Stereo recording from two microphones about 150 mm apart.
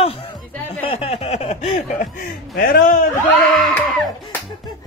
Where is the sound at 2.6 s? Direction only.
75° left (ahead or behind).